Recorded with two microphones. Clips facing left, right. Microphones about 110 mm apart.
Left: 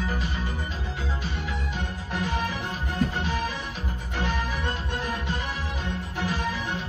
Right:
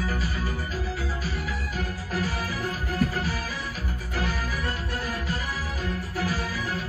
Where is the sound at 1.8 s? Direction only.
25° left (ahead or behind).